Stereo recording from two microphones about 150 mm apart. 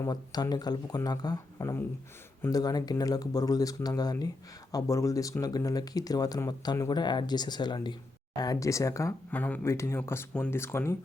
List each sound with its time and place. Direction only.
0.0 s speech: 25° left (ahead or behind)